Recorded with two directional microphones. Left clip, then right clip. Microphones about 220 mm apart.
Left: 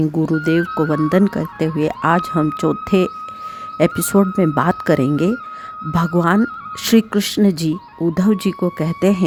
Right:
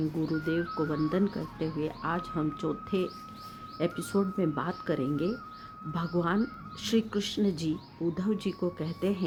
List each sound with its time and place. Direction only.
0.3 s speech: 50° left (ahead or behind)